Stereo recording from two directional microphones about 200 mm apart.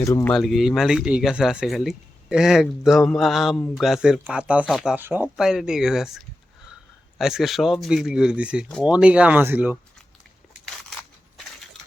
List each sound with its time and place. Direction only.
0.0 s speech: 15° left (ahead or behind)
0.3 s speech: centre (ahead or behind)